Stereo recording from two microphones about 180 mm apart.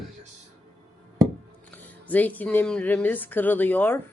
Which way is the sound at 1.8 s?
10° left (ahead or behind).